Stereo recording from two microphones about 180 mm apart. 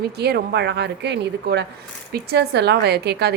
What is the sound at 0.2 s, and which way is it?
A woman's voice, 65° right (ahead or behind).